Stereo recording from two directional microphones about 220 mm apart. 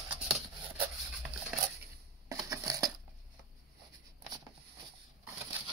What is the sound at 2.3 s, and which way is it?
Crushing, 15° right (ahead or behind).